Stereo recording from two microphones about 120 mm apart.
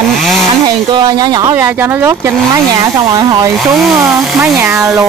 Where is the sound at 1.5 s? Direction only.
20° right (ahead or behind).